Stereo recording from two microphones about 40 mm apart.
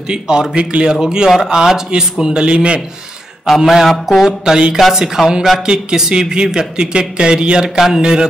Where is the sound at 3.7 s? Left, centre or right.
Centre.